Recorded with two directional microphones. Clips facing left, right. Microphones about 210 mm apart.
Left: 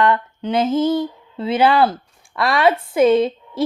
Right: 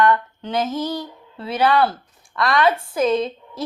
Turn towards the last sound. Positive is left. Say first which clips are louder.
# left 5 dB
turn(degrees=25)  # may be behind; listen again after turning